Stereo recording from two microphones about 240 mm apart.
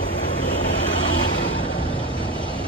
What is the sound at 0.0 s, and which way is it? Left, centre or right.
Vehicle, left.